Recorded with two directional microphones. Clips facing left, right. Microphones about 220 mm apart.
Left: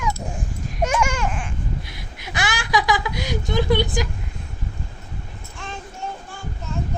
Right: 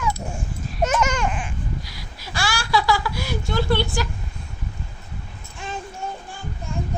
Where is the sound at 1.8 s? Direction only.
20° left (ahead or behind).